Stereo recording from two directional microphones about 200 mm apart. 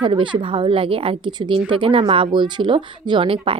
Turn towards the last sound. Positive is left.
turn(degrees=-25)  # may be behind; listen again after turning